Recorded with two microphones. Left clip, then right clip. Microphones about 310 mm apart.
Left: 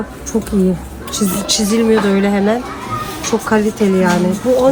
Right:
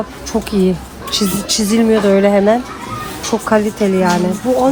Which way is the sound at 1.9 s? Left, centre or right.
Right.